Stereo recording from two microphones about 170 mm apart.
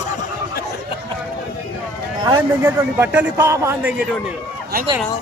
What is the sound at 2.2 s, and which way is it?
A man's voice, 20° right (ahead or behind).